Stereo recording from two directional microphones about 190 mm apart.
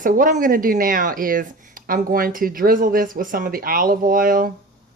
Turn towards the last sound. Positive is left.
turn(degrees=-45)  # may be behind; listen again after turning